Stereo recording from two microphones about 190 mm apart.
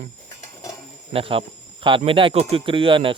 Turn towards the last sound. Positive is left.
turn(degrees=-30)  # may be behind; listen again after turning